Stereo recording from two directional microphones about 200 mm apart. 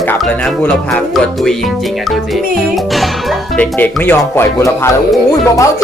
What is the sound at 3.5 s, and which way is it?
Speech, 10° left (ahead or behind).